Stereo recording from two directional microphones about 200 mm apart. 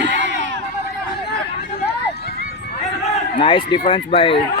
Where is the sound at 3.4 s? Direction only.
25° left (ahead or behind).